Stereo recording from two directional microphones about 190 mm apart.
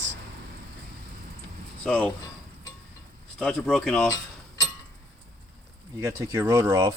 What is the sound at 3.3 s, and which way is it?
Speech, 5° left (ahead or behind).